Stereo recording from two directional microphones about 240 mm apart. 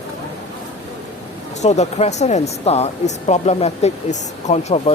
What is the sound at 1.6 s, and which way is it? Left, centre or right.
Speech, left.